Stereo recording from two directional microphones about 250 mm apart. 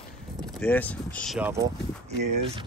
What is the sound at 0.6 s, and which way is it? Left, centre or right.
Speech, centre.